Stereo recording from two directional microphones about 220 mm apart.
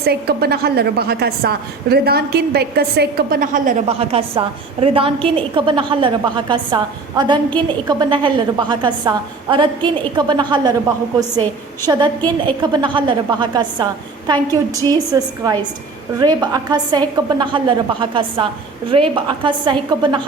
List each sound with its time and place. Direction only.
0.0 s a woman's voice: 45° right (ahead or behind); by 10.8 s 20° right (ahead or behind)
11.9 s a woman's voice: 20° right (ahead or behind)
14.8 s a woman's voice: 15° right (ahead or behind)